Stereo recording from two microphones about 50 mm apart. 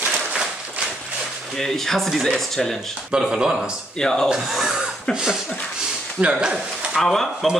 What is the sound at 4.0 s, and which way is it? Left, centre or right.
Speech, centre.